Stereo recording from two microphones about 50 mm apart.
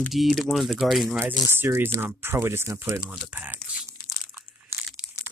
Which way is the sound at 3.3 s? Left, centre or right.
Right.